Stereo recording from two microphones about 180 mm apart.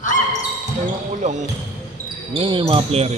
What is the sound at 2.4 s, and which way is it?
Speech, 30° right (ahead or behind).